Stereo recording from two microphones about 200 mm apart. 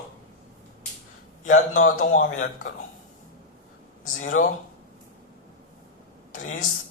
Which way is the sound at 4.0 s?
40° left (ahead or behind).